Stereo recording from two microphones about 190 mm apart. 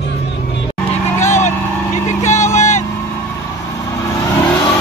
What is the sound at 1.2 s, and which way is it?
Vehicle, 40° left (ahead or behind).